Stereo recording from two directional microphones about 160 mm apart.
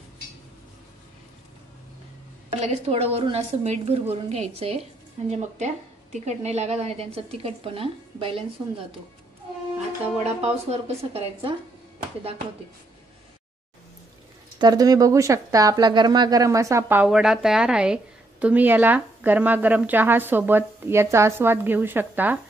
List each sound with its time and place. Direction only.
2.6 s a woman's voice: 40° right (ahead or behind)
9.8 s a woman's voice: 40° right (ahead or behind)
14.6 s speech: 25° right (ahead or behind)